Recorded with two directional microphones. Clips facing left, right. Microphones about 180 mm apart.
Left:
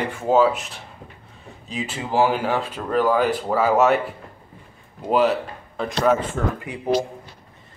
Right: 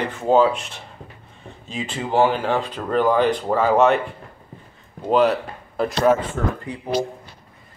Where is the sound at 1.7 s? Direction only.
5° left (ahead or behind).